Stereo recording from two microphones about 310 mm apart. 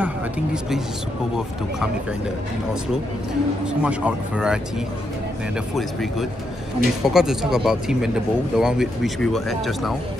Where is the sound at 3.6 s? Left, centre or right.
Centre.